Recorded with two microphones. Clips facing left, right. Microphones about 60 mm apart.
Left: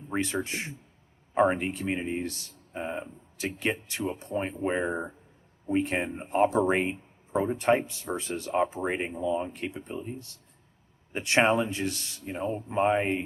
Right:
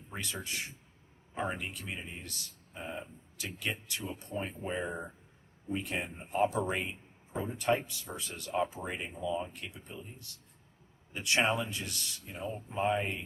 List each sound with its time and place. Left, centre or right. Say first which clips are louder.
0.2 s speech: left 8 dB; left
5.7 s speech: left 9 dB; left
8.5 s speech: left 6 dB; left